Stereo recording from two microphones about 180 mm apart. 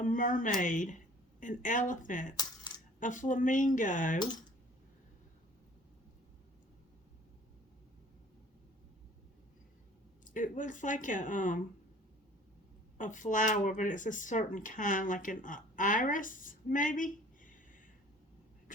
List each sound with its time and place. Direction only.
0.0 s speech: 45° left (ahead or behind)
2.3 s coin: 20° left (ahead or behind)
3.0 s speech: 45° left (ahead or behind)
10.2 s speech: 45° left (ahead or behind)
13.0 s speech: 45° left (ahead or behind)